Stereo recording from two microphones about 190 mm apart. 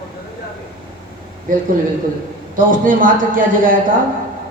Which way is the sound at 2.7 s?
45° right (ahead or behind).